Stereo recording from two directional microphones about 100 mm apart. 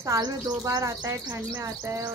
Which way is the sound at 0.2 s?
35° right (ahead or behind).